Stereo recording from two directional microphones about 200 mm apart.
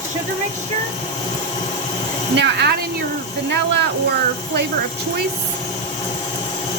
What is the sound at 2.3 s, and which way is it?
Speech, 60° right (ahead or behind).